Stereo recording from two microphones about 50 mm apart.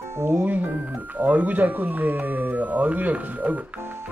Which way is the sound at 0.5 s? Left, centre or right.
Right.